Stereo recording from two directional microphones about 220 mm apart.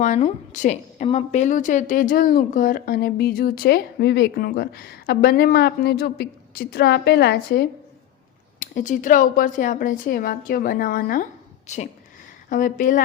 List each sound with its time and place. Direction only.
0.0 s a woman's voice: 35° left (ahead or behind)
8.5 s a woman's voice: 35° left (ahead or behind)